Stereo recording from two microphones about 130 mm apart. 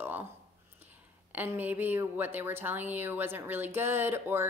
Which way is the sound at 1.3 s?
15° right (ahead or behind).